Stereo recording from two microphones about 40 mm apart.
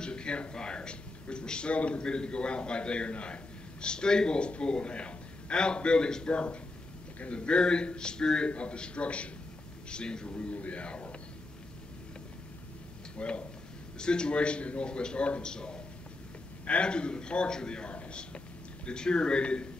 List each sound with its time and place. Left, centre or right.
0.0 s a man's voice: left
13.2 s a man's voice: left
17.9 s a sound: left
18.9 s a man's voice: left